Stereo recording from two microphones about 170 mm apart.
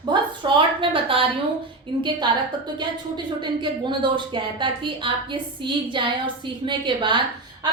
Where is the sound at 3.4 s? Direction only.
25° right (ahead or behind).